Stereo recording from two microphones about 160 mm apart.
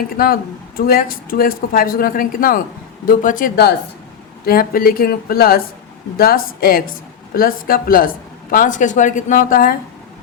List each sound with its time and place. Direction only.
0.2 s a woman's voice: 65° left (ahead or behind)